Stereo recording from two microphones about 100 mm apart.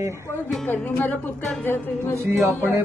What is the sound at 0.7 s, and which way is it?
Speech, 15° left (ahead or behind).